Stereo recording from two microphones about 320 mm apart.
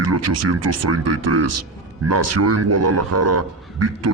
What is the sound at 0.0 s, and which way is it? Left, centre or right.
A man's voice, right.